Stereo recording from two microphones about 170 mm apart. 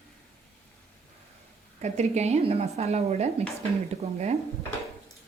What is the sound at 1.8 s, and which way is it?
A woman's voice, 40° right (ahead or behind).